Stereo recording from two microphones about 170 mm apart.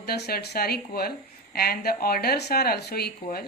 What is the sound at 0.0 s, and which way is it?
A woman's voice, 65° left (ahead or behind).